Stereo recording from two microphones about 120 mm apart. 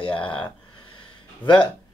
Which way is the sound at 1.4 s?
45° left (ahead or behind).